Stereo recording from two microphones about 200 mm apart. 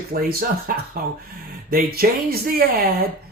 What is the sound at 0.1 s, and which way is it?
Speech, 50° right (ahead or behind).